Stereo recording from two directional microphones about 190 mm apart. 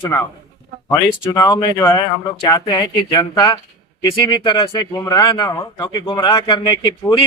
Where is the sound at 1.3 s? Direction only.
20° left (ahead or behind).